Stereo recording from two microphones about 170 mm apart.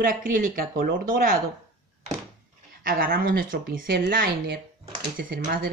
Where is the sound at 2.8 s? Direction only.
55° right (ahead or behind).